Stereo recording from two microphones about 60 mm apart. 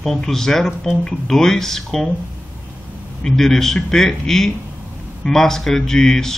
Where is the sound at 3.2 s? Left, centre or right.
Centre.